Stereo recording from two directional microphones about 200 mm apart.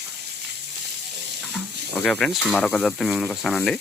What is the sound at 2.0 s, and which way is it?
Speech, centre (ahead or behind).